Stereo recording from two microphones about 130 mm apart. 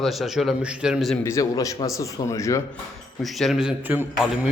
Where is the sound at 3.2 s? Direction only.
Centre (ahead or behind).